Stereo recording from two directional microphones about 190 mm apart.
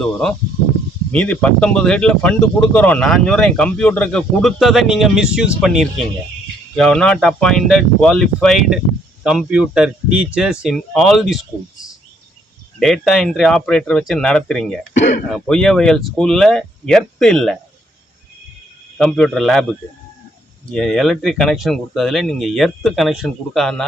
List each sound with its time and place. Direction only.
0.0 s speech: 5° left (ahead or behind)
12.8 s speech: centre (ahead or behind)
14.9 s speech: 40° left (ahead or behind)
15.3 s speech: 5° left (ahead or behind)
18.9 s speech: centre (ahead or behind)
20.7 s speech: 5° left (ahead or behind)